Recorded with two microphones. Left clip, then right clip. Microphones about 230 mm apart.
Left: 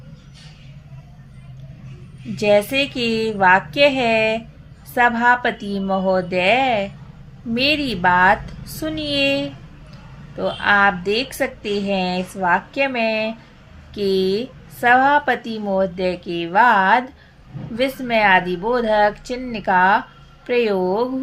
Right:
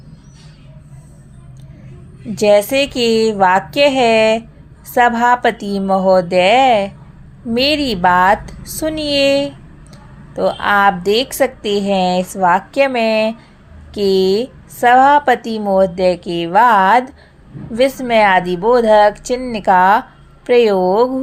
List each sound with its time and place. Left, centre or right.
2.4 s a woman's voice: right